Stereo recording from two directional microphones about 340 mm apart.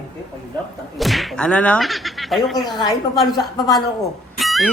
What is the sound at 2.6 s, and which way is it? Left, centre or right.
Speech, centre.